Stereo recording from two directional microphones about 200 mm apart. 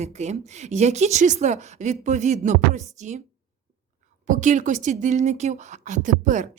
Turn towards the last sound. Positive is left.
turn(degrees=-40)  # may be behind; listen again after turning